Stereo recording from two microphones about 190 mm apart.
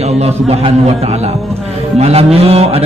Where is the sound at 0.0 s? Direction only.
35° right (ahead or behind).